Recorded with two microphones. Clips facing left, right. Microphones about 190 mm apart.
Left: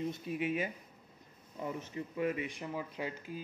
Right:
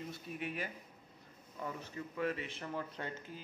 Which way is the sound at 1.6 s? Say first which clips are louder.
Left 4 dB; 20° left (ahead or behind).